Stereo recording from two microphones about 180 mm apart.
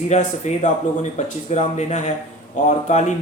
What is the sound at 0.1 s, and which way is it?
Speech, 40° left (ahead or behind).